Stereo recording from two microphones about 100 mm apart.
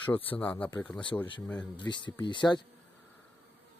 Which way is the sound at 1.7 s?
50° left (ahead or behind).